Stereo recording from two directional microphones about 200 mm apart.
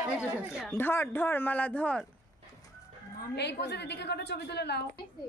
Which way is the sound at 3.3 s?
55° left (ahead or behind).